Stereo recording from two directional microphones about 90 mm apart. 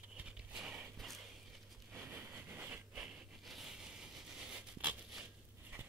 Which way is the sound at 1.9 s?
20° right (ahead or behind).